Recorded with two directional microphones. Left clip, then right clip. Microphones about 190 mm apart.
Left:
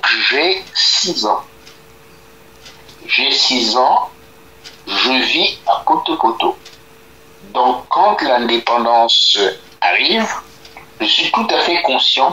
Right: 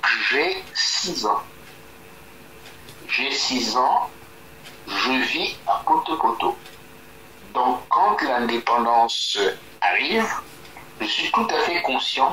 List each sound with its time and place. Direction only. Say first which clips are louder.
0.0 s speech: left 6 dB; 30° left (ahead or behind)
3.1 s speech: left 9 dB; 30° left (ahead or behind)
7.5 s speech: left 6 dB; 35° left (ahead or behind)